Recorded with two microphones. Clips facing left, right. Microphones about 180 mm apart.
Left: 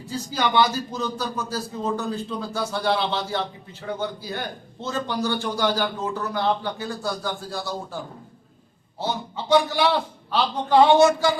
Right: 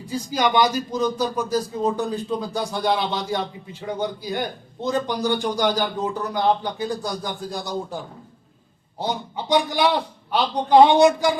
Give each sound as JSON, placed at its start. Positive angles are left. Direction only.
{"t": 0.0, "sound": "a man's voice", "side_deg": -15}
{"t": 9.0, "sound": "a man's voice", "side_deg": -15}